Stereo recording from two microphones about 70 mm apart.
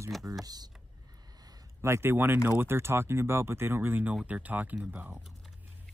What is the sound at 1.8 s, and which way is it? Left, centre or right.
Speech, right.